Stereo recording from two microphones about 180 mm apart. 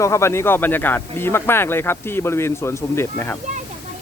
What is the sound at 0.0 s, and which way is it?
Speech, 15° left (ahead or behind).